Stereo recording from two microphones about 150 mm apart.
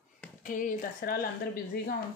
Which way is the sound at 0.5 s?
60° left (ahead or behind).